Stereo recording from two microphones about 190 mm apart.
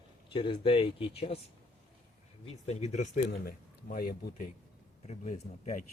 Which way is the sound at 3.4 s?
50° left (ahead or behind).